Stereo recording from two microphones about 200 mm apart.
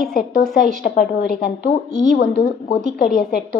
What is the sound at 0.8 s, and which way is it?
A woman's voice, 50° left (ahead or behind).